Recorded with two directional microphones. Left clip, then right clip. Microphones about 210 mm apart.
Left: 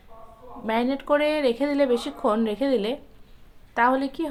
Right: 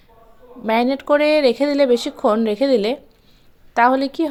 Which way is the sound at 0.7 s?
35° right (ahead or behind).